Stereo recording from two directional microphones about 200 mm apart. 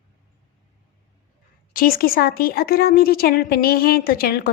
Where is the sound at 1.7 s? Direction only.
45° left (ahead or behind).